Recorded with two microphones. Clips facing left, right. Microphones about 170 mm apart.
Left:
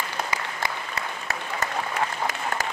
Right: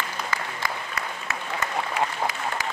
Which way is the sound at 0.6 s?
30° left (ahead or behind).